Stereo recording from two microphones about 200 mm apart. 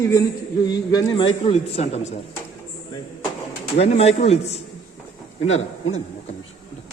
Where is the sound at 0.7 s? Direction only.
20° left (ahead or behind).